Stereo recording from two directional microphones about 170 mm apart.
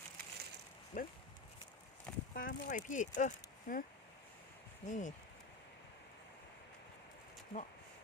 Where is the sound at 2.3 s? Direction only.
55° left (ahead or behind).